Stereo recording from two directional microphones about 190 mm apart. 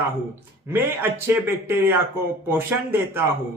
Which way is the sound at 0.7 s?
10° right (ahead or behind).